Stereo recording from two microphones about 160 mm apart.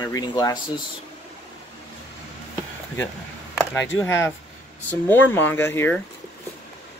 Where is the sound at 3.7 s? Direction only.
15° left (ahead or behind).